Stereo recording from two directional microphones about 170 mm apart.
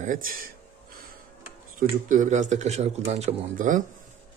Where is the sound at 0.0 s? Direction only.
50° right (ahead or behind).